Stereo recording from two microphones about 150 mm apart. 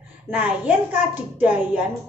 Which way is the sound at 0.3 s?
10° right (ahead or behind).